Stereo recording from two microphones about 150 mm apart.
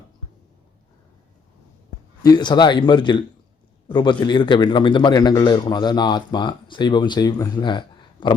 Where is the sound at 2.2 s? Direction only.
30° left (ahead or behind).